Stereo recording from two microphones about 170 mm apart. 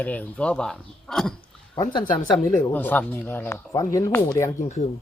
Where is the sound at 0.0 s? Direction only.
10° left (ahead or behind).